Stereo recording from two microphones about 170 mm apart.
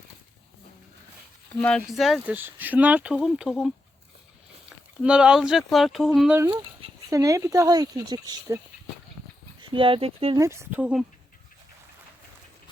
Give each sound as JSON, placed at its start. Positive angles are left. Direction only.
{"t": 1.6, "sound": "speech", "side_deg": 0}
{"t": 5.0, "sound": "speech", "side_deg": -5}
{"t": 7.1, "sound": "speech", "side_deg": -20}
{"t": 10.3, "sound": "speech", "side_deg": -15}